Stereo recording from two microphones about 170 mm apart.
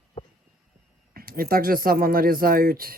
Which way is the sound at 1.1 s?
60° right (ahead or behind).